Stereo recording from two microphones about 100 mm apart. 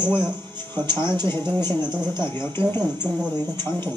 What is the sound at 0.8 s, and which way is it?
Speech, 45° right (ahead or behind).